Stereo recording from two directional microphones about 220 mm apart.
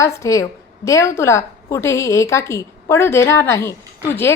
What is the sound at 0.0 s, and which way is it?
A woman's voice, 15° left (ahead or behind).